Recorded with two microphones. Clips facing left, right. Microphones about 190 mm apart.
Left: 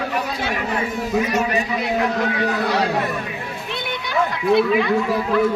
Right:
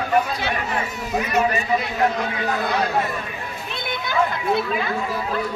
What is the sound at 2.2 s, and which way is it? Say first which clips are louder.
Speech: left 3 dB; 75° left (ahead or behind).